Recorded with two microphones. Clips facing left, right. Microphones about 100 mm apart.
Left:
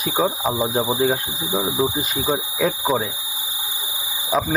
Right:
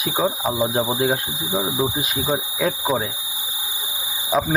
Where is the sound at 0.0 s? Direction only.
5° right (ahead or behind).